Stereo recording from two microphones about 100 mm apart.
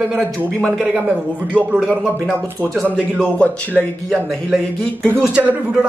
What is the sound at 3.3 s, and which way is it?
Speech, 15° left (ahead or behind).